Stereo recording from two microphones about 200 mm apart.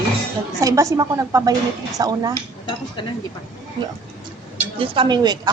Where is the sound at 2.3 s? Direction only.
20° left (ahead or behind).